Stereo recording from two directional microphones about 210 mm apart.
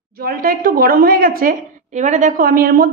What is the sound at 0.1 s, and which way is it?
A woman's voice, 45° right (ahead or behind).